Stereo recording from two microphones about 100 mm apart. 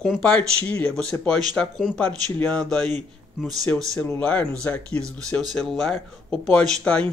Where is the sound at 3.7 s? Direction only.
20° left (ahead or behind).